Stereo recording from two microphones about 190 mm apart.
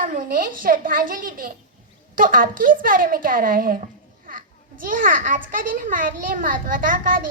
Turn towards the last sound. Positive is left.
turn(degrees=-45)  # may be behind; listen again after turning